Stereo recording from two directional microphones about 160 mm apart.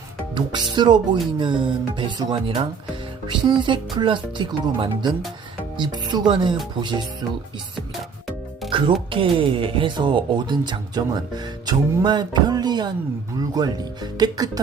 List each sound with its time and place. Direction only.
0.3 s speech: 30° right (ahead or behind)
8.7 s speech: 30° right (ahead or behind)